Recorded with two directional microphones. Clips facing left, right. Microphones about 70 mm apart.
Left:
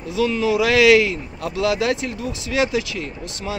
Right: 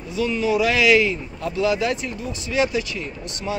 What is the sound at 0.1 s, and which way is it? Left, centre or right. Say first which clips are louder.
Speech: left 2 dB; left.